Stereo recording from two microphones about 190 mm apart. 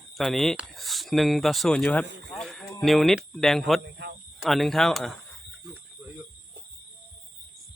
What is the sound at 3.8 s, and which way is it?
Cricket, 65° right (ahead or behind).